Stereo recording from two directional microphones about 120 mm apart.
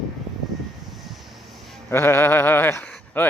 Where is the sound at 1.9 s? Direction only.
20° left (ahead or behind).